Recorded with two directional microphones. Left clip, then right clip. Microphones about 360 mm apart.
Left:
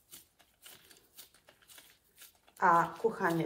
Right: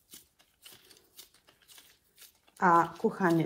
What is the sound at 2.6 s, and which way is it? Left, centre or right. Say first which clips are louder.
Speech: right 2 dB; centre.